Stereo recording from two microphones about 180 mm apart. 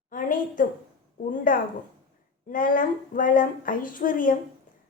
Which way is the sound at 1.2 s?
45° left (ahead or behind).